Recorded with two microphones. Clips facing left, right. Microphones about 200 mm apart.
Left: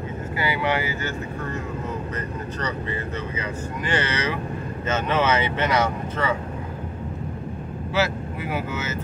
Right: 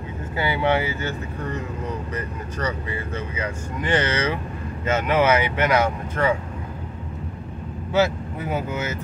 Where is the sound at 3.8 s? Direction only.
20° right (ahead or behind).